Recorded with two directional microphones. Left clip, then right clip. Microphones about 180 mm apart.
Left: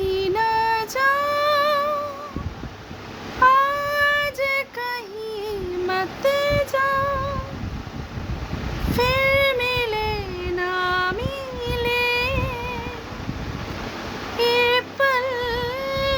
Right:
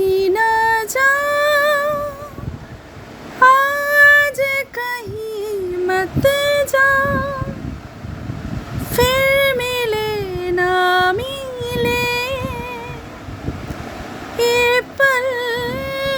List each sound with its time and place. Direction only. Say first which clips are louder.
0.1 s music: right 6 dB; 25° right (ahead or behind)
3.4 s female singing: right 5 dB; 35° right (ahead or behind)
9.0 s child singing: right 5 dB; 30° right (ahead or behind)
14.3 s music: right 4 dB; 30° right (ahead or behind)